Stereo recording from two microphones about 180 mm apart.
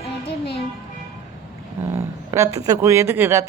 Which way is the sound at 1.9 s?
15° right (ahead or behind).